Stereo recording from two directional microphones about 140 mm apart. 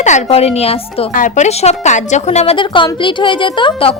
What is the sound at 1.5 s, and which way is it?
A woman's voice, 55° left (ahead or behind).